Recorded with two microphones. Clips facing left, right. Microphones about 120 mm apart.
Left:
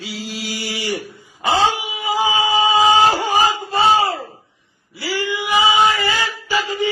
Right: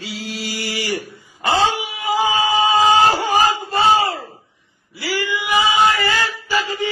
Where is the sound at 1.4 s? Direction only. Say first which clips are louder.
Even; 15° left (ahead or behind).